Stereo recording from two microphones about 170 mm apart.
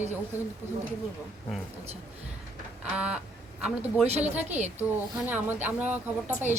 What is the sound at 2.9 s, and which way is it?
Speech, 5° right (ahead or behind).